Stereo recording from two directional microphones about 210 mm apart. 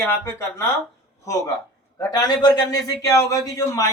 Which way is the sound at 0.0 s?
10° left (ahead or behind).